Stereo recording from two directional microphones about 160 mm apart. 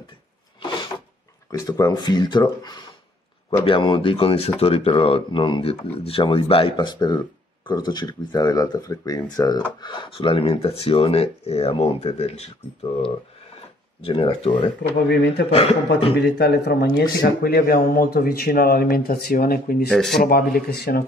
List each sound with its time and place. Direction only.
0.6 s a sound: 30° left (ahead or behind)
1.5 s speech: 25° left (ahead or behind); by 12.5 s 40° left (ahead or behind)
14.0 s speech: 35° left (ahead or behind)
14.8 s speech: 90° left
17.2 s speech: 70° left (ahead or behind)
19.9 s speech: 5° left (ahead or behind)
20.2 s speech: 75° left (ahead or behind)